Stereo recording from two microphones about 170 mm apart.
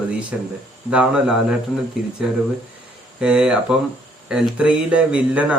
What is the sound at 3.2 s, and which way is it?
Speech, 5° right (ahead or behind).